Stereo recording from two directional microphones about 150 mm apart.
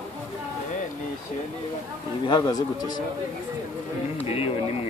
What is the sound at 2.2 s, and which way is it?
Speech, 30° left (ahead or behind).